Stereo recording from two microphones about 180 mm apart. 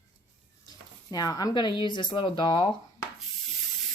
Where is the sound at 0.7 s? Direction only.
20° left (ahead or behind).